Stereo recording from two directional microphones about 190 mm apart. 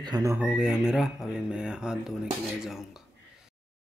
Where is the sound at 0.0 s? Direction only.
20° right (ahead or behind).